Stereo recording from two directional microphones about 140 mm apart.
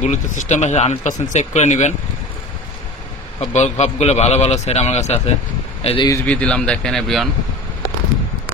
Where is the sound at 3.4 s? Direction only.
50° left (ahead or behind).